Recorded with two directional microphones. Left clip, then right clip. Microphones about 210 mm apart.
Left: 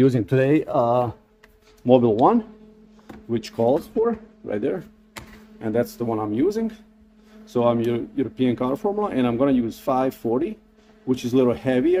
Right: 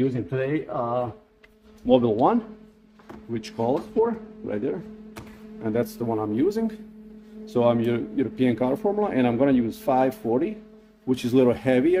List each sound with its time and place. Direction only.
0.0 s speech: 45° left (ahead or behind)
1.9 s speech: 15° left (ahead or behind); by 12.0 s 5° right (ahead or behind)